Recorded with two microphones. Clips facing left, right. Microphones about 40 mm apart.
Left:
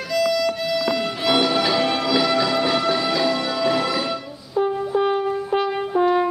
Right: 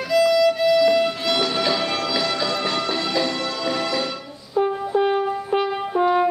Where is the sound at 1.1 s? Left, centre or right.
Centre.